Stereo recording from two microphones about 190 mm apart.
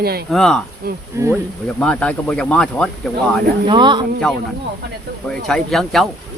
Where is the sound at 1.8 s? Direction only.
5° left (ahead or behind).